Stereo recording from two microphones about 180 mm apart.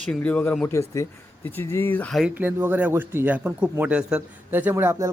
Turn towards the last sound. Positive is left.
turn(degrees=-15)  # may be behind; listen again after turning